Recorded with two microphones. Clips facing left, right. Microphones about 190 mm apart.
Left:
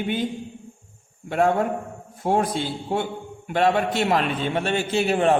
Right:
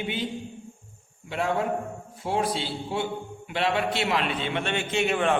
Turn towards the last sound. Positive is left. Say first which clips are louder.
# left 4 dB
turn(degrees=35)  # may be behind; listen again after turning